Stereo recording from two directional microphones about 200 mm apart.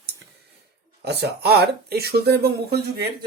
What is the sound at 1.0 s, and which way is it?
Speech, 55° right (ahead or behind).